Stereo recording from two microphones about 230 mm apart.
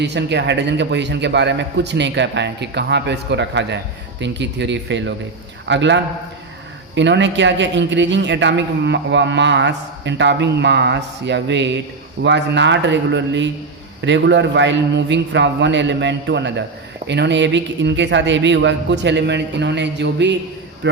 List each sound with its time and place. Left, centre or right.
0.0 s speech: right